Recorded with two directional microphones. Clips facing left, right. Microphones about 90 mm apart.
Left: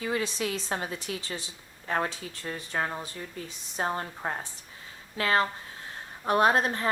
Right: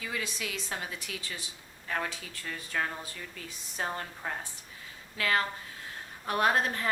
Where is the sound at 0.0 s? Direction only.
35° left (ahead or behind).